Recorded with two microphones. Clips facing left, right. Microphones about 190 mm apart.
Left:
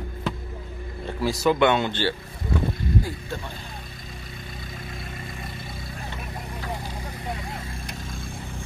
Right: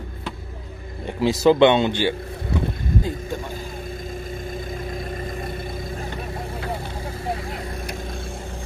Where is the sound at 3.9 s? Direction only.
45° right (ahead or behind).